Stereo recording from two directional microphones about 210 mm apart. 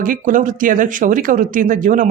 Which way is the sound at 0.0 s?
40° right (ahead or behind).